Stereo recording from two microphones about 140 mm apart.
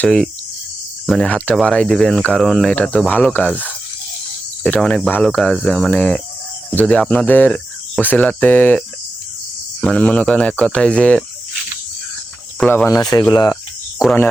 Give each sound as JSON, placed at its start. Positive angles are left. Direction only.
{"t": 0.0, "sound": "speech", "side_deg": 5}
{"t": 6.7, "sound": "cricket", "side_deg": 10}
{"t": 9.8, "sound": "cricket", "side_deg": 10}
{"t": 12.5, "sound": "cricket", "side_deg": 10}
{"t": 12.9, "sound": "speech", "side_deg": 25}
{"t": 14.0, "sound": "speech", "side_deg": -5}